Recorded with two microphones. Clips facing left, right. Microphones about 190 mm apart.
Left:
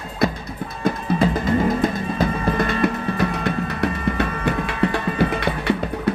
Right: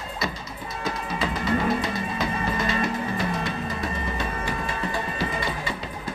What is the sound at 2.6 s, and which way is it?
Music, 60° left (ahead or behind).